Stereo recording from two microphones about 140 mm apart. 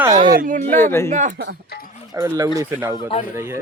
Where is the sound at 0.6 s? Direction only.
15° left (ahead or behind).